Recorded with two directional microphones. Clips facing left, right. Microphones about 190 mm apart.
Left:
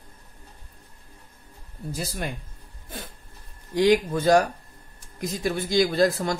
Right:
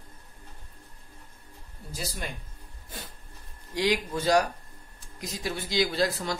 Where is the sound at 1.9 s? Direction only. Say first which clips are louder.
Left 4 dB; 55° left (ahead or behind).